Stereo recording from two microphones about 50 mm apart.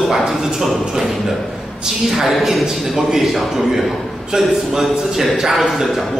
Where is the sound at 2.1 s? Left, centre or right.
Centre.